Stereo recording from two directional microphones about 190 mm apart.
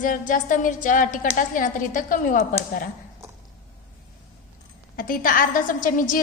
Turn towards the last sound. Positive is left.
turn(degrees=45)  # may be behind; listen again after turning